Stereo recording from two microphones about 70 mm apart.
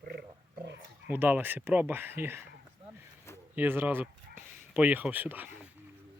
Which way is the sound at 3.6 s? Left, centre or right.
Right.